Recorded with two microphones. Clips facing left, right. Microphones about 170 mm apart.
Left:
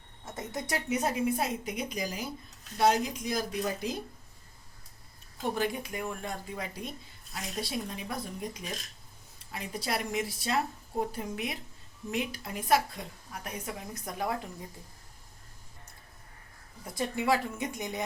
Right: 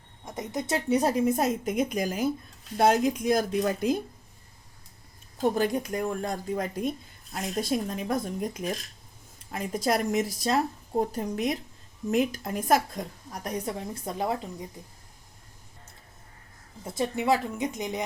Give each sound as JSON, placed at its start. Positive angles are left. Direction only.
{"t": 0.3, "sound": "a woman's voice", "side_deg": -20}
{"t": 0.9, "sound": "speech", "side_deg": -35}
{"t": 5.4, "sound": "a woman's voice", "side_deg": -45}
{"t": 16.8, "sound": "a woman's voice", "side_deg": -20}